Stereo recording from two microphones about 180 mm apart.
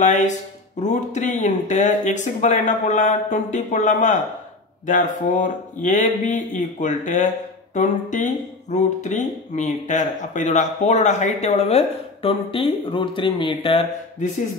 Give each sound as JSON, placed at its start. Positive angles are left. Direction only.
{"t": 0.7, "sound": "a man's voice", "side_deg": 40}